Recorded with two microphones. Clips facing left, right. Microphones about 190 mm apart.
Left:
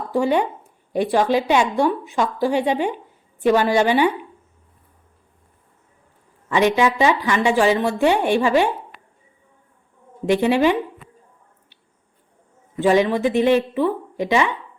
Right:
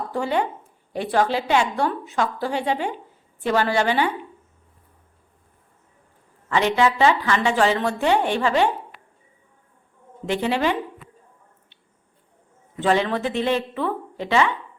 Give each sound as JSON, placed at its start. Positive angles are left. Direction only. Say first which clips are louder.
{"t": 0.1, "sound": "a woman's voice", "louder": "left 6 dB", "side_deg": 15}
{"t": 6.5, "sound": "a woman's voice", "louder": "left 2 dB", "side_deg": 15}
{"t": 10.2, "sound": "a woman's voice", "louder": "left 6 dB", "side_deg": 15}
{"t": 12.7, "sound": "a woman's voice", "louder": "left 4 dB", "side_deg": 15}